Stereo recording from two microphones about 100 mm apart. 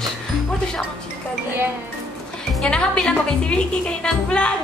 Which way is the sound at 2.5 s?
10° left (ahead or behind).